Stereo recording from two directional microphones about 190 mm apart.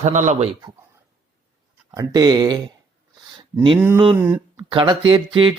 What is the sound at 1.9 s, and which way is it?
Speech, 20° right (ahead or behind).